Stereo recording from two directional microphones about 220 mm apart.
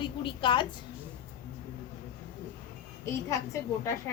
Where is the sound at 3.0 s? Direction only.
15° left (ahead or behind).